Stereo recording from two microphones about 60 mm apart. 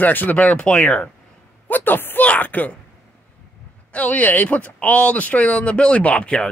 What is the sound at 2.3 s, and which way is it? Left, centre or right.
Speech, left.